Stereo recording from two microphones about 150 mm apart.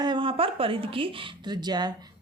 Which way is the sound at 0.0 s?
35° right (ahead or behind).